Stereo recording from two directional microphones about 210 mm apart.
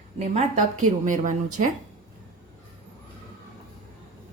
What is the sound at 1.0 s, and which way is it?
Speech, 35° right (ahead or behind).